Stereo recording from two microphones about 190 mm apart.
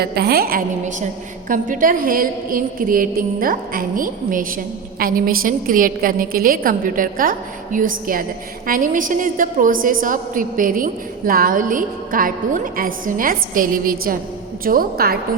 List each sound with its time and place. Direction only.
0.0 s a woman's voice: 55° right (ahead or behind)